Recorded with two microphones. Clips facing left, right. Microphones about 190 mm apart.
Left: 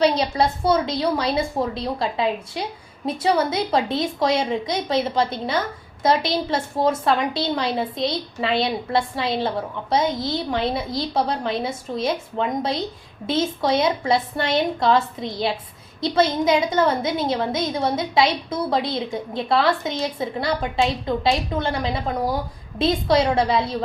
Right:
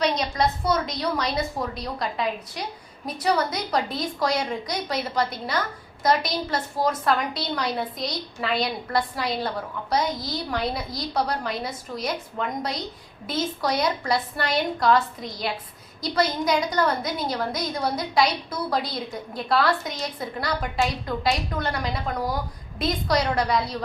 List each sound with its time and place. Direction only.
0.0 s a woman's voice: 30° left (ahead or behind)